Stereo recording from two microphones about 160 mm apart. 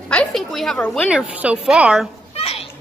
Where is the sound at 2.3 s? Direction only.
40° left (ahead or behind).